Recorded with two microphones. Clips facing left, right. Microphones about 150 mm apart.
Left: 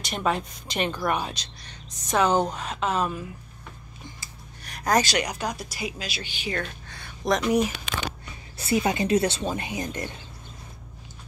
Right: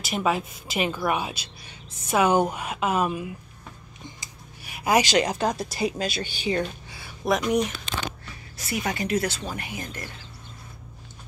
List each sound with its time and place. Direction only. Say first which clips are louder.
0.0 s a woman's voice: right 1 dB; 5° right (ahead or behind)
4.6 s a sound: right 1 dB; 5° right (ahead or behind)
5.0 s speech: right 5 dB; 25° right (ahead or behind); by 6.2 s 45° right (ahead or behind)
6.6 s speech: right 5 dB; 5° right (ahead or behind)
8.6 s speech: left 5 dB; 25° left (ahead or behind)